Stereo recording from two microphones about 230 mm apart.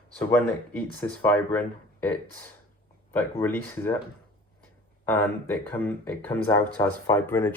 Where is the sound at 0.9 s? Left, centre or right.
Centre.